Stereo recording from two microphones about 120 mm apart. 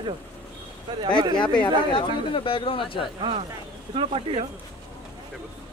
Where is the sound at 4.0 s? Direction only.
50° right (ahead or behind).